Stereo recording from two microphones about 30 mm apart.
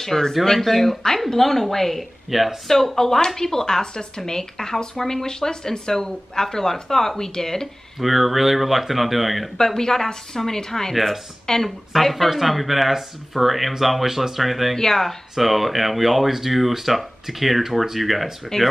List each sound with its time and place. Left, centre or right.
0.0 s speech: centre
2.3 s speech: centre
2.7 s speech: centre
8.0 s speech: centre
9.8 s speech: centre
11.6 s speech: centre
14.8 s speech: centre
15.3 s speech: centre
18.5 s speech: centre